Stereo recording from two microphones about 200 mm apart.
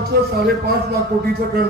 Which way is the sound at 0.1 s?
50° right (ahead or behind).